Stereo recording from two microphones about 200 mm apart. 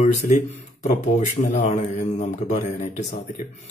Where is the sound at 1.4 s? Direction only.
35° left (ahead or behind).